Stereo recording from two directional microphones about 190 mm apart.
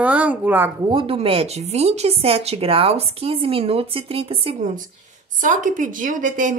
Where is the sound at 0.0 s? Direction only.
10° right (ahead or behind).